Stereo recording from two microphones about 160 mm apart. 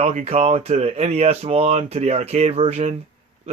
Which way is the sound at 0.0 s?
40° right (ahead or behind).